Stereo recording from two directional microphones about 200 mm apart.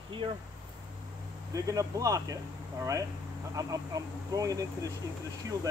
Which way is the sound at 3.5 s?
15° right (ahead or behind).